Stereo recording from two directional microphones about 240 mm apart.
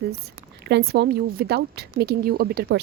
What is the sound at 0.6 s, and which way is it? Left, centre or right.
A woman's voice, right.